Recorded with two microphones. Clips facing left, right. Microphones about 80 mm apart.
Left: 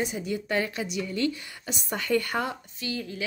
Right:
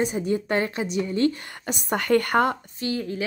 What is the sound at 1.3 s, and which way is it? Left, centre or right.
A woman's voice, right.